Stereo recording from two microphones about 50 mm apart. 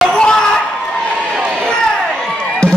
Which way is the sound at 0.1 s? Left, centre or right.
Centre.